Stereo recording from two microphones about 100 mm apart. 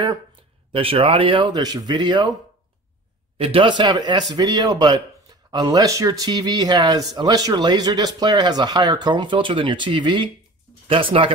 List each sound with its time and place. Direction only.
0.7 s speech: 70° right (ahead or behind); by 2.3 s 50° right (ahead or behind)
3.3 s speech: 70° right (ahead or behind); by 10.3 s 50° right (ahead or behind)
10.9 s speech: 60° right (ahead or behind)